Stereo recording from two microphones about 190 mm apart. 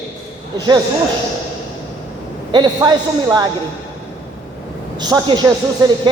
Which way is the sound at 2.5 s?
25° right (ahead or behind).